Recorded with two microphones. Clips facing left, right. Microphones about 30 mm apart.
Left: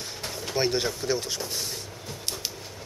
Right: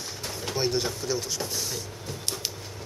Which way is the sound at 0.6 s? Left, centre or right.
Centre.